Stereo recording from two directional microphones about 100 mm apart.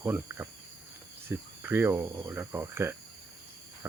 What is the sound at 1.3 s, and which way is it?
Speech, 20° right (ahead or behind).